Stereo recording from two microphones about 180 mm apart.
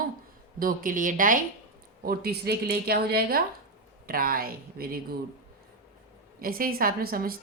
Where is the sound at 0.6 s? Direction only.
50° right (ahead or behind).